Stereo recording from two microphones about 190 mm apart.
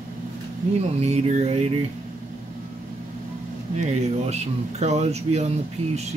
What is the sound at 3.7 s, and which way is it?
Speech, 35° right (ahead or behind).